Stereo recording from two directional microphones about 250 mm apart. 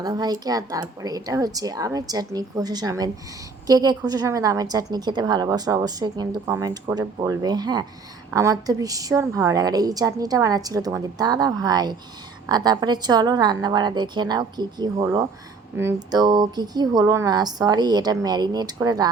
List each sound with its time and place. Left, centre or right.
0.0 s a woman's voice: centre